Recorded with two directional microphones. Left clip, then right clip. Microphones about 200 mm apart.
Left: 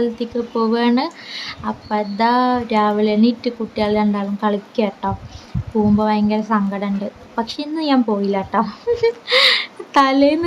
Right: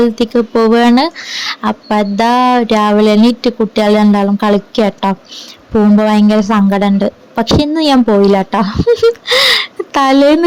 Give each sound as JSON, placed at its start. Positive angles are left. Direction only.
{"t": 0.0, "sound": "speech", "side_deg": -40}